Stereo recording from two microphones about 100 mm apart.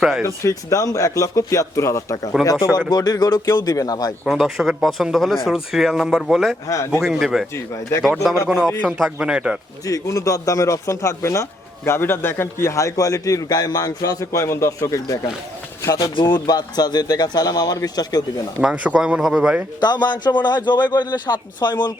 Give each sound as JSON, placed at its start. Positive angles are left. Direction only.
{"t": 0.3, "sound": "a man's voice", "side_deg": 30}
{"t": 4.3, "sound": "speech", "side_deg": -5}
{"t": 6.7, "sound": "a man's voice", "side_deg": 30}
{"t": 7.0, "sound": "speech", "side_deg": -5}
{"t": 7.5, "sound": "speech", "side_deg": 30}
{"t": 8.0, "sound": "speech", "side_deg": 0}
{"t": 9.8, "sound": "a man's voice", "side_deg": 35}
{"t": 16.1, "sound": "a man's voice", "side_deg": 45}
{"t": 18.6, "sound": "speech", "side_deg": -10}
{"t": 19.8, "sound": "a man's voice", "side_deg": 45}